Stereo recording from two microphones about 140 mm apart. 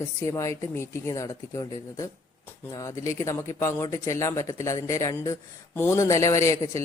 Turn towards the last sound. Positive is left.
turn(degrees=20)  # may be behind; listen again after turning